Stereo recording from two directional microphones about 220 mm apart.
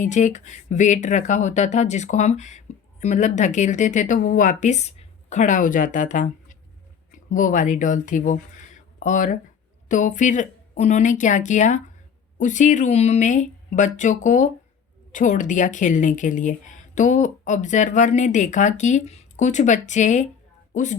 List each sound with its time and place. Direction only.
0.0 s speech: 35° left (ahead or behind)